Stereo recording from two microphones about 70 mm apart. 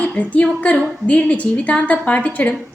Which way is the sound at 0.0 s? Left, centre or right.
Left.